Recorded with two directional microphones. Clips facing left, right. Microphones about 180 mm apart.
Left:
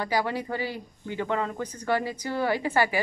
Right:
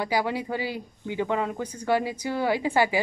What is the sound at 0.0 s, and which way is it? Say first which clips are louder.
Speech: right 1 dB; 10° right (ahead or behind).